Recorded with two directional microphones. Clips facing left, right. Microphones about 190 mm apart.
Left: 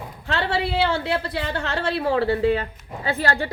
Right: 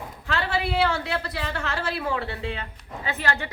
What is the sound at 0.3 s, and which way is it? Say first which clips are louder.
A woman's voice: left 3 dB; 30° left (ahead or behind).